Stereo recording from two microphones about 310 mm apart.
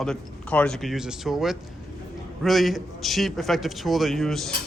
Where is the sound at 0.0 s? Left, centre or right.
Centre.